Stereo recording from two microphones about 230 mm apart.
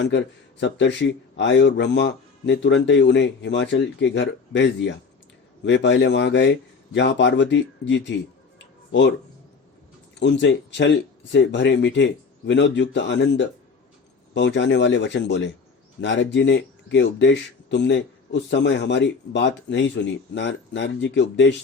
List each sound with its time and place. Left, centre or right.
0.6 s speech: left
8.5 s music: left
10.2 s speech: left